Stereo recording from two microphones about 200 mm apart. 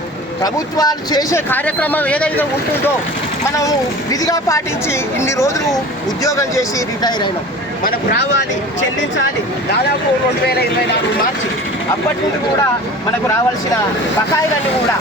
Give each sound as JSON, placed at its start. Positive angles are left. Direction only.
{"t": 0.4, "sound": "speech", "side_deg": 20}